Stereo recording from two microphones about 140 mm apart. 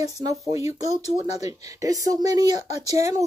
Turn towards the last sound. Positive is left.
turn(degrees=-20)  # may be behind; listen again after turning